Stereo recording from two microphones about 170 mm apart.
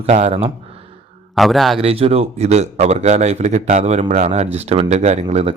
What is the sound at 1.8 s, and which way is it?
A man's voice, 35° right (ahead or behind).